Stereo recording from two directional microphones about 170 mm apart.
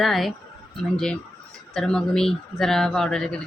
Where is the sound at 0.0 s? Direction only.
Centre (ahead or behind).